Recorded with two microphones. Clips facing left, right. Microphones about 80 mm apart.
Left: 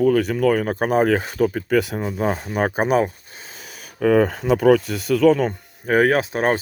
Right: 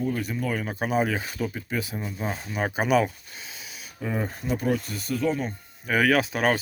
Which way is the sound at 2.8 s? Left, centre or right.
Left.